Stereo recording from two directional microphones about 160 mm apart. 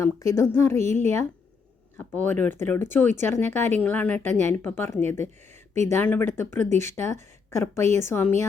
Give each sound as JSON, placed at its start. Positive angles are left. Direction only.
{"t": 0.0, "sound": "speech", "side_deg": 20}